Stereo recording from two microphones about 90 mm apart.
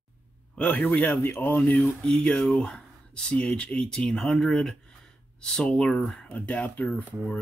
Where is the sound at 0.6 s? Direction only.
15° left (ahead or behind).